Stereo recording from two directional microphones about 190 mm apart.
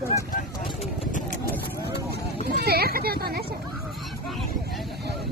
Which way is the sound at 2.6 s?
55° right (ahead or behind).